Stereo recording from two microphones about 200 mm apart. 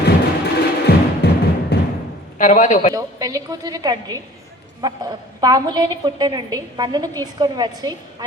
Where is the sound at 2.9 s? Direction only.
15° right (ahead or behind).